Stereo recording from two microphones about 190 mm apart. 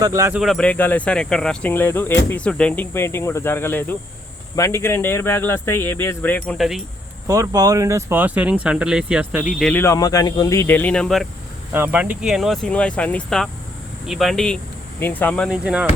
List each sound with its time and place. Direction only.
0.0 s speech: 15° right (ahead or behind)
0.3 s speech: centre (ahead or behind)
7.3 s speech: 20° right (ahead or behind); by 9.7 s centre (ahead or behind)
9.7 s speech: 15° left (ahead or behind)
11.7 s speech: 10° right (ahead or behind)